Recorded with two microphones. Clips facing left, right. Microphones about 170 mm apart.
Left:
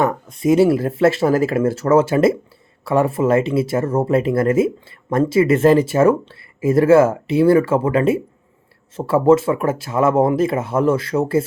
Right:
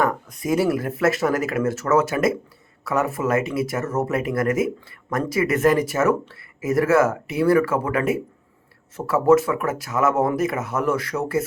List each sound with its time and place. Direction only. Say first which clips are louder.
0.0 s speech: left 5 dB; 25° left (ahead or behind)